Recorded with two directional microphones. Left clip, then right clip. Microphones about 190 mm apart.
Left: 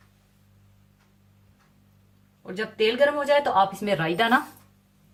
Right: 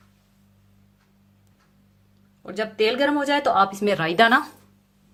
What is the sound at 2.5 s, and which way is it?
Speech, 50° right (ahead or behind).